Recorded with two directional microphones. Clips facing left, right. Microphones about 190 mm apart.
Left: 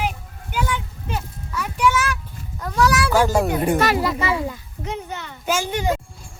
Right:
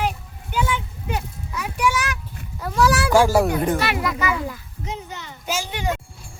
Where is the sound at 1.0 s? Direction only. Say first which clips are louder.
Right 3 dB; 15° right (ahead or behind).